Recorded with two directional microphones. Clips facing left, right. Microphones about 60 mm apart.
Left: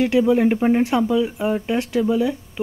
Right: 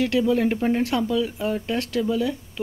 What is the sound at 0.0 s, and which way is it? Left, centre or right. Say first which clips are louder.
Speech: left 4 dB; left.